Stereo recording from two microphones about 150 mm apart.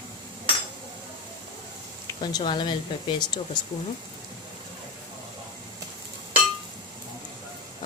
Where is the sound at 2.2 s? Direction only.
30° left (ahead or behind).